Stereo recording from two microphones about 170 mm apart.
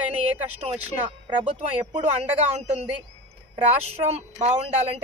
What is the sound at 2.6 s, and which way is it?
Speech, 40° right (ahead or behind).